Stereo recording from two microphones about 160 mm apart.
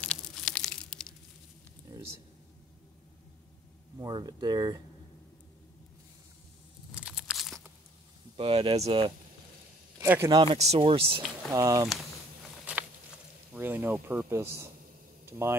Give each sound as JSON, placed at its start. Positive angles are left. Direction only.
{"t": 0.0, "sound": "a sound", "side_deg": 5}
{"t": 4.0, "sound": "speech", "side_deg": -25}
{"t": 7.0, "sound": "a sound", "side_deg": -5}
{"t": 8.4, "sound": "speech", "side_deg": -35}
{"t": 9.9, "sound": "speech", "side_deg": -15}
{"t": 10.3, "sound": "speech", "side_deg": -35}
{"t": 11.5, "sound": "speech", "side_deg": -20}
{"t": 12.7, "sound": "patter", "side_deg": -5}
{"t": 13.6, "sound": "speech", "side_deg": -15}